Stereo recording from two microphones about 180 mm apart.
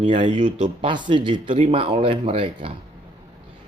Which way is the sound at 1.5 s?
35° right (ahead or behind).